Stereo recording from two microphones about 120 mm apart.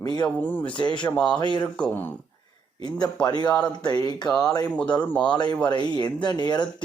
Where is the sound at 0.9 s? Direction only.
10° left (ahead or behind).